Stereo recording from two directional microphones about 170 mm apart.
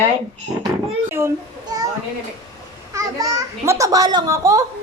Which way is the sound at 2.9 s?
20° right (ahead or behind).